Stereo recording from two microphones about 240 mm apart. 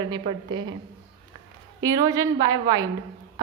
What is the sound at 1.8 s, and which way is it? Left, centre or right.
Speech, centre.